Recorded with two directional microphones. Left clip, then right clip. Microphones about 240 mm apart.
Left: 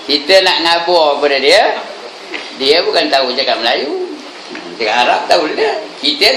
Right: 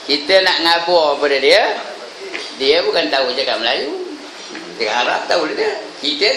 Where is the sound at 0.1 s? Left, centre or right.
Centre.